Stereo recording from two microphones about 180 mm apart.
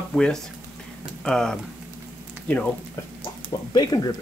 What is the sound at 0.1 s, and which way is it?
Speech, 5° left (ahead or behind).